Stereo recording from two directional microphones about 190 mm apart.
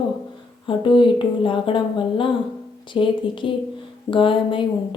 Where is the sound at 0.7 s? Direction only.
25° left (ahead or behind).